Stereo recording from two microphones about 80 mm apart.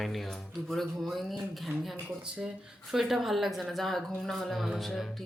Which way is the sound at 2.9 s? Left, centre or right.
Centre.